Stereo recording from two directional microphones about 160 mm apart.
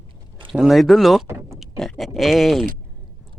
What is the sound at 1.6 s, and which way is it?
Speech, centre (ahead or behind).